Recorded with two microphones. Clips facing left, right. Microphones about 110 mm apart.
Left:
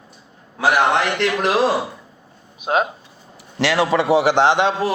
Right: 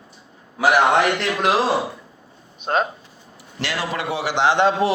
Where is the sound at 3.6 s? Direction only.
90° left.